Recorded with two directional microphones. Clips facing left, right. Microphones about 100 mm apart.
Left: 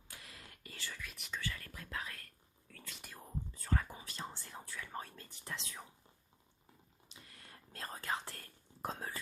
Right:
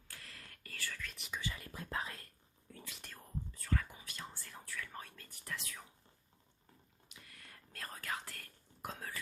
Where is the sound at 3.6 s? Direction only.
30° left (ahead or behind).